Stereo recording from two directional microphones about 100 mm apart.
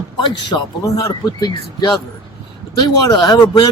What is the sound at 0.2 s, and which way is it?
Speech, 45° left (ahead or behind).